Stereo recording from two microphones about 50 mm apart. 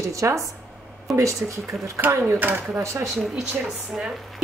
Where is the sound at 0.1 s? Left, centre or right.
Right.